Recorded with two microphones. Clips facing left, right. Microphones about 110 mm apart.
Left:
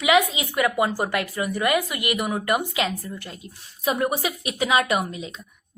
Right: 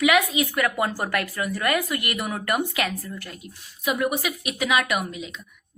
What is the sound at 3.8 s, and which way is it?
A woman's voice, 35° left (ahead or behind).